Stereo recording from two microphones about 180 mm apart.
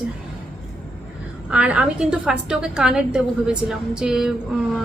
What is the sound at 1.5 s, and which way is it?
A woman's voice, 5° right (ahead or behind).